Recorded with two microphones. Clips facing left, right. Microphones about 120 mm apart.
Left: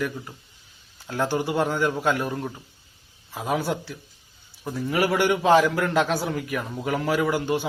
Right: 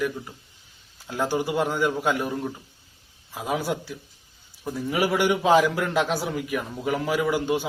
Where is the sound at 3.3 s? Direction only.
10° right (ahead or behind).